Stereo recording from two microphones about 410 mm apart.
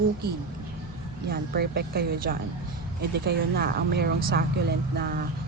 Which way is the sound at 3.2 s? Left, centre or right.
Right.